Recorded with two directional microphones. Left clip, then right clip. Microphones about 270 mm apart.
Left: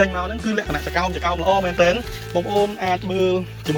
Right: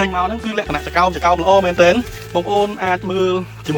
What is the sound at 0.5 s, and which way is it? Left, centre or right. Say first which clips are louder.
Speech: right 2 dB; centre.